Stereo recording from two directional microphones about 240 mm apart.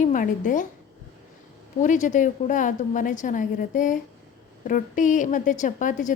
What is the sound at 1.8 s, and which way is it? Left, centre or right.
A woman's voice, left.